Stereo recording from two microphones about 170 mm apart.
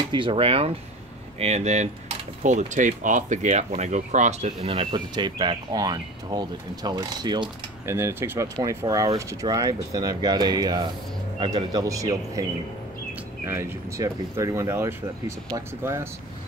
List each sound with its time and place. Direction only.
0.1 s speech: 30° right (ahead or behind)
13.5 s speech: 15° right (ahead or behind)